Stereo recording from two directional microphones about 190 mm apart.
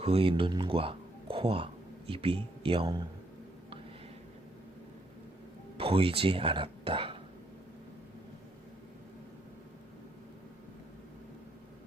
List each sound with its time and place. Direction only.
0.0 s speech: 30° right (ahead or behind)
5.7 s speech: 30° right (ahead or behind)